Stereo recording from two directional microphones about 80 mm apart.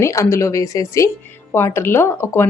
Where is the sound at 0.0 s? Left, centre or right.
Left.